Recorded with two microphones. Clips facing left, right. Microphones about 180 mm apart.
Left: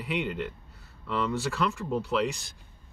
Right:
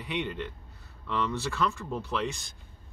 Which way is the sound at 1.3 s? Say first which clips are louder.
Left 1 dB; 5° left (ahead or behind).